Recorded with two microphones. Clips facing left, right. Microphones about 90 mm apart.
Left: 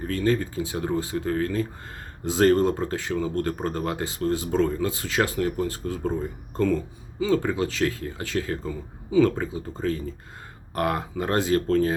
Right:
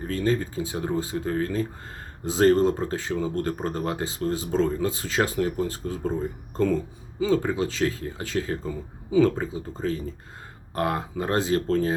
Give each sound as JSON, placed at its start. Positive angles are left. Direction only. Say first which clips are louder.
{"t": 0.1, "sound": "speech", "louder": "left 1 dB", "side_deg": -20}
{"t": 7.2, "sound": "speech", "louder": "even", "side_deg": -25}